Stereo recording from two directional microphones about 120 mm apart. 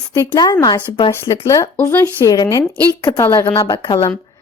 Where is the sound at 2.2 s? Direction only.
30° left (ahead or behind).